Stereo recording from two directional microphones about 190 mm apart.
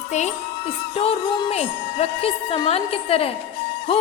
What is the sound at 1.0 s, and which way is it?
A child's voice, 35° left (ahead or behind).